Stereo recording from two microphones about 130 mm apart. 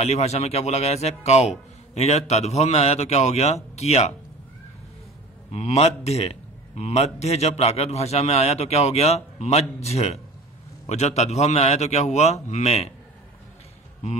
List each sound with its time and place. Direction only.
0.0 s a man's voice: 55° left (ahead or behind)
5.5 s a man's voice: 55° left (ahead or behind)